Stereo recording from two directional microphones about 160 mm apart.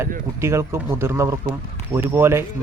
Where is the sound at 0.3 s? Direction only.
15° right (ahead or behind).